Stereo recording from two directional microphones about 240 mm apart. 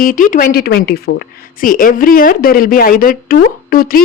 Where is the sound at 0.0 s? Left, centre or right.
Left.